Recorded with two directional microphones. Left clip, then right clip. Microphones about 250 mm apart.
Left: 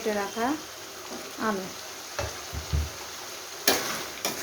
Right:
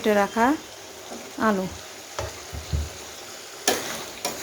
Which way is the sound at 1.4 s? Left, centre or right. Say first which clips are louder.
Right 6 dB; right.